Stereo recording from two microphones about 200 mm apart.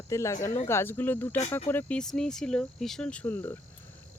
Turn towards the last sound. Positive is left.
turn(degrees=10)  # may be behind; listen again after turning